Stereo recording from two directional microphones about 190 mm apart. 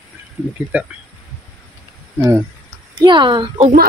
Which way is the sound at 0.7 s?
10° right (ahead or behind).